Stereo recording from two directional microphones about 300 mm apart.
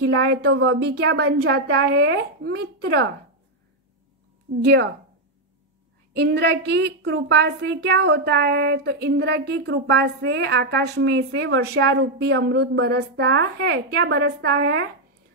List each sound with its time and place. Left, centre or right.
0.0 s a woman's voice: right
4.6 s a woman's voice: right
6.1 s a woman's voice: right